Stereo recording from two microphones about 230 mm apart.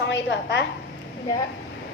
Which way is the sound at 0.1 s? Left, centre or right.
Left.